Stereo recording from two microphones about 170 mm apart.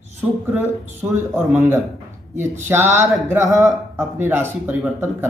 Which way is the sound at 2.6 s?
15° right (ahead or behind).